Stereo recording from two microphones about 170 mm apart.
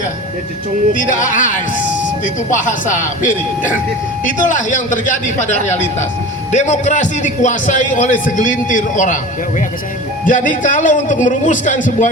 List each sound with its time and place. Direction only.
0.9 s a man's voice: 50° left (ahead or behind)
10.2 s a man's voice: 50° left (ahead or behind)